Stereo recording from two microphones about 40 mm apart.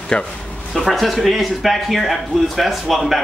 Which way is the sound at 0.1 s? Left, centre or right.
Left.